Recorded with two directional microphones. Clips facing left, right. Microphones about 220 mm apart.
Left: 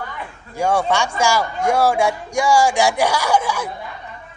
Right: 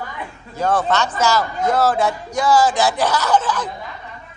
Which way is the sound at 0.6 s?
10° left (ahead or behind).